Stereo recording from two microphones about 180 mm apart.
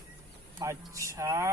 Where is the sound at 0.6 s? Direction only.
15° right (ahead or behind).